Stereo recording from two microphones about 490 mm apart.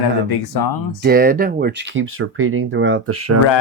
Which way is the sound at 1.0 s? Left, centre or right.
Centre.